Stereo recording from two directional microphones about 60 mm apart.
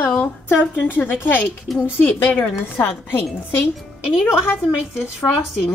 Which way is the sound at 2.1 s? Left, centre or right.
Left.